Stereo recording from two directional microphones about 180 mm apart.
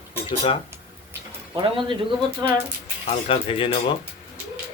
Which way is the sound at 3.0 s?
30° left (ahead or behind).